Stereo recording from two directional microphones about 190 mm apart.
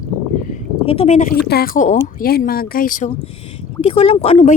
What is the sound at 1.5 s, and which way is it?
Speech, 50° left (ahead or behind).